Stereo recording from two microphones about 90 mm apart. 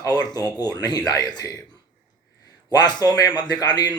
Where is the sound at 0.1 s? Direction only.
50° left (ahead or behind).